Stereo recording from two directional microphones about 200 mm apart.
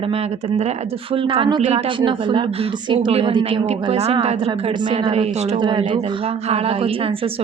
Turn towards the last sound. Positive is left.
turn(degrees=-25)  # may be behind; listen again after turning